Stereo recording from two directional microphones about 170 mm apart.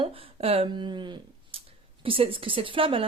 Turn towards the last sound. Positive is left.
turn(degrees=-30)  # may be behind; listen again after turning